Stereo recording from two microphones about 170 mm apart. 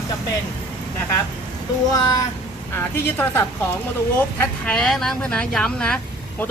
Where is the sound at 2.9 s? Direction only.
15° left (ahead or behind).